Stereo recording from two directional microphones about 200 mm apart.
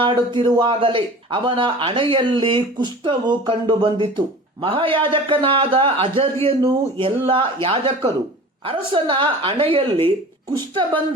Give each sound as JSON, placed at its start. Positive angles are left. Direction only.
{"t": 0.0, "sound": "a man's voice", "side_deg": -25}